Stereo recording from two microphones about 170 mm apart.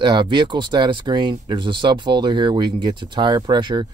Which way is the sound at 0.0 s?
30° right (ahead or behind).